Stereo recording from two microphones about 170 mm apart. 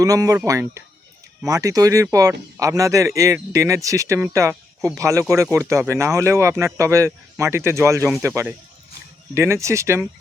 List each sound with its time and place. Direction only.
0.0 s speech: 20° right (ahead or behind)